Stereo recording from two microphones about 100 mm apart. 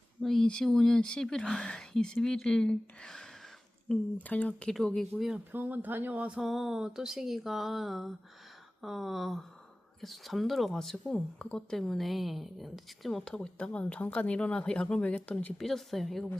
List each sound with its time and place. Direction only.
0.2 s speech: 5° left (ahead or behind)
5.5 s speech: 20° right (ahead or behind); by 16.4 s 5° left (ahead or behind)